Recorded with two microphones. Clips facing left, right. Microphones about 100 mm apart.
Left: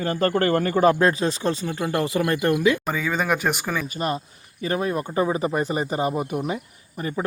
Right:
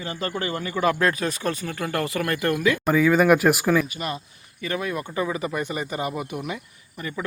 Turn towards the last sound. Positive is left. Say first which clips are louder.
# left 4 dB
turn(degrees=35)  # may be behind; listen again after turning